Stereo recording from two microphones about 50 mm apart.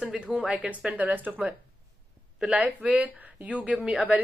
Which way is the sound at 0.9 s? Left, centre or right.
Right.